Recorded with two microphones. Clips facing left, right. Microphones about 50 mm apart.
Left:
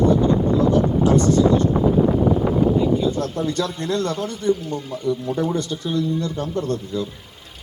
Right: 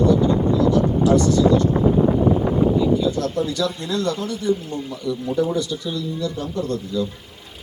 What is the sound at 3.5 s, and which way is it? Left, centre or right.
A man's voice, left.